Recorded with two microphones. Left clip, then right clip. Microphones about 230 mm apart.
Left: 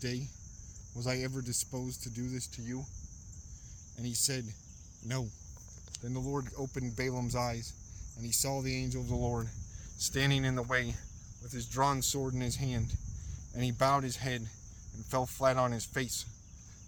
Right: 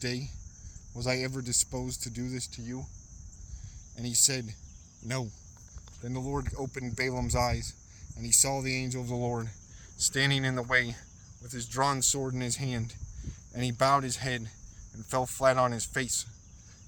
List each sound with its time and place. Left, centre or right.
0.0 s speech: right
3.9 s speech: right